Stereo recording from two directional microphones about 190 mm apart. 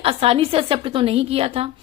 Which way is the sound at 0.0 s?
30° right (ahead or behind).